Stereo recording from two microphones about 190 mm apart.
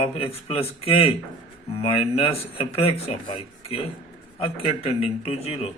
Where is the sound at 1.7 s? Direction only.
30° left (ahead or behind).